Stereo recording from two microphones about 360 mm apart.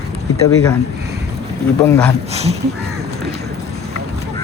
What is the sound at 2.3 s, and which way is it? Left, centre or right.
Speech, centre.